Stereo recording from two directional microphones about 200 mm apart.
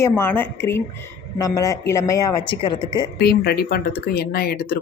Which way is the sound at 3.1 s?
50° left (ahead or behind).